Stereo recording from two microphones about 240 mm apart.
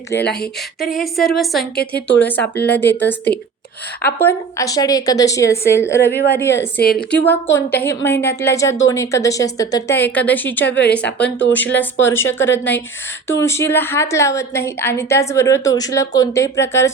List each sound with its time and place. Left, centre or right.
0.3 s a woman's voice: centre
2.0 s speech: left
2.2 s a woman's voice: centre
6.1 s speech: left
6.3 s a woman's voice: centre
10.7 s speech: left
11.5 s a woman's voice: centre